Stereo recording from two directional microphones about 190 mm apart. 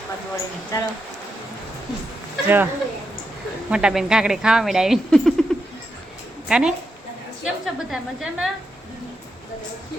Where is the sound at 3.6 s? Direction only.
5° right (ahead or behind).